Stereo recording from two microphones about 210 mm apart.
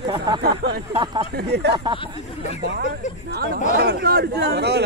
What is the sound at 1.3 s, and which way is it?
Speech, 50° right (ahead or behind).